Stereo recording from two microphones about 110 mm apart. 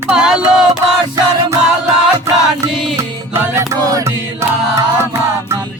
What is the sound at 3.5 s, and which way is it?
Music, 30° right (ahead or behind).